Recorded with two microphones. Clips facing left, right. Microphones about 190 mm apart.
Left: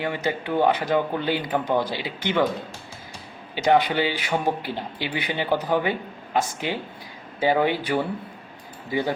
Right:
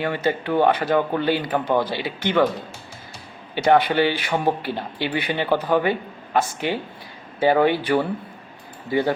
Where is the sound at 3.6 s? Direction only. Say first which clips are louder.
Right 3 dB; 15° left (ahead or behind).